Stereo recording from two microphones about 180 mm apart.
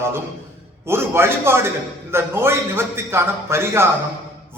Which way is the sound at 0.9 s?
15° right (ahead or behind).